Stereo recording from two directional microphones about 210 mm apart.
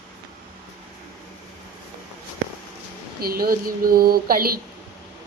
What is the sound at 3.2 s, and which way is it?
A woman's voice, 45° right (ahead or behind).